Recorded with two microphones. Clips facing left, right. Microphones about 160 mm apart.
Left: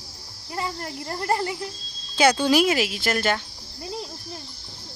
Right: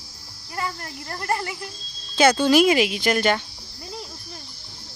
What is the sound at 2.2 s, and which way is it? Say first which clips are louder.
Speech: right 2 dB; 10° left (ahead or behind).